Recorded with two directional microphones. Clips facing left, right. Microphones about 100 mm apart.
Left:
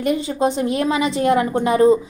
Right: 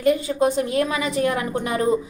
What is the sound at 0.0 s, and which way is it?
Speech, 20° left (ahead or behind).